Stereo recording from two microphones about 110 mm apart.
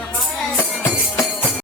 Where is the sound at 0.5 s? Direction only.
20° left (ahead or behind).